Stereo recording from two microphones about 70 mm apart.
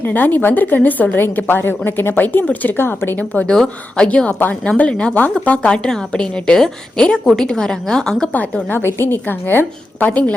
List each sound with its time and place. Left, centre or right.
0.0 s a woman's voice: left
3.4 s a woman's voice: centre
4.4 s a woman's voice: left
4.8 s a woman's voice: centre
8.3 s a woman's voice: centre
8.7 s a woman's voice: left
10.1 s a woman's voice: centre